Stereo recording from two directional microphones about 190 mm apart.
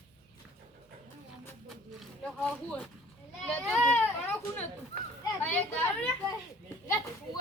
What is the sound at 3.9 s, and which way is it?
Baby cry, 10° left (ahead or behind).